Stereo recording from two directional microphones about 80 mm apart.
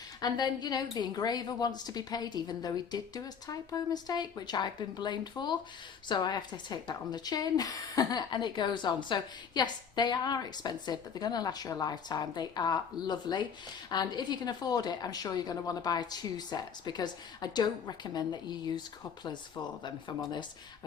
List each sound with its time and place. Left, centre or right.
0.2 s a woman's voice: left
8.3 s a woman's voice: left